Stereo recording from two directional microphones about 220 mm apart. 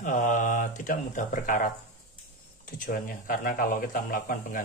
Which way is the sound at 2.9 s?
40° left (ahead or behind).